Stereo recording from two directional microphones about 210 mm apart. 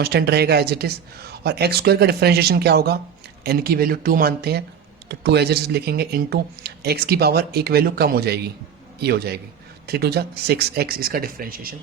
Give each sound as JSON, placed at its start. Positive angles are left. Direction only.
{"t": 0.0, "sound": "speech", "side_deg": -50}